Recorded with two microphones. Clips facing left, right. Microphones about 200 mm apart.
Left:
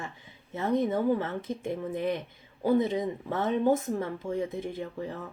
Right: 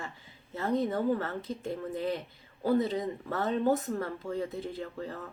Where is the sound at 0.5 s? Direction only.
20° left (ahead or behind).